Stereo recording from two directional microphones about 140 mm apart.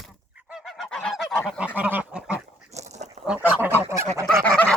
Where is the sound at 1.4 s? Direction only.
5° right (ahead or behind).